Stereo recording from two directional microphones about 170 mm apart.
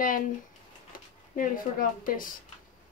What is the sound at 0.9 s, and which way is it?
Speech, 55° left (ahead or behind).